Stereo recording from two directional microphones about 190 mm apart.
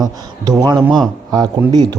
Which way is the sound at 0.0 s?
20° right (ahead or behind).